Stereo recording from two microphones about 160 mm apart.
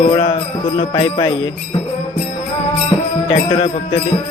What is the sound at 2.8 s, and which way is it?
Music, 35° left (ahead or behind).